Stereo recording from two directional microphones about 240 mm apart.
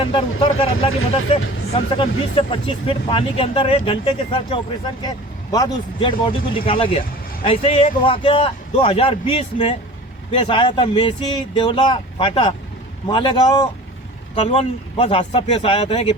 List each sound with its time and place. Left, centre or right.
0.0 s a man's voice: left